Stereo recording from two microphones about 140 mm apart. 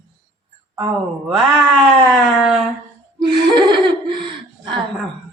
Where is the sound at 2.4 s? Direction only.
5° right (ahead or behind).